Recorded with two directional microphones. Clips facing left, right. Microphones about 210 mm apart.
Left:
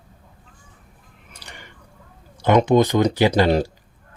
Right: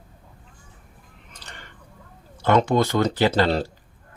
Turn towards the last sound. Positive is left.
turn(degrees=15)  # may be behind; listen again after turning